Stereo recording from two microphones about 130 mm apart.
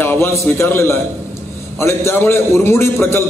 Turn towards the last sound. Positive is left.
turn(degrees=20)  # may be behind; listen again after turning